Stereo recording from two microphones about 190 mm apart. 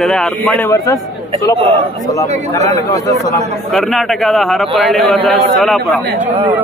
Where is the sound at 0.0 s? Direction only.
5° left (ahead or behind).